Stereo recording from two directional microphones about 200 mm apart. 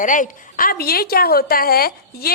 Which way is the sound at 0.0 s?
40° left (ahead or behind).